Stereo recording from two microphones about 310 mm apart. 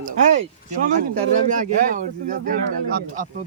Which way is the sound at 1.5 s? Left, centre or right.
Right.